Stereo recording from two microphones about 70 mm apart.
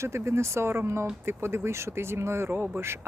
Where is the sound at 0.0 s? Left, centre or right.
Right.